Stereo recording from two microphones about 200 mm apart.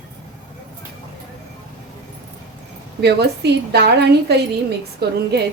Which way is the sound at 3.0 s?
55° right (ahead or behind).